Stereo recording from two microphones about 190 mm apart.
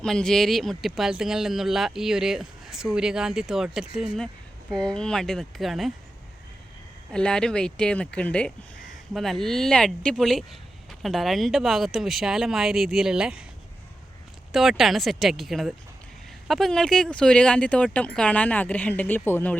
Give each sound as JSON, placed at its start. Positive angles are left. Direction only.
{"t": 0.0, "sound": "speech", "side_deg": 5}
{"t": 4.7, "sound": "speech", "side_deg": -20}
{"t": 4.9, "sound": "speech", "side_deg": 5}
{"t": 7.1, "sound": "speech", "side_deg": 5}
{"t": 14.5, "sound": "speech", "side_deg": 0}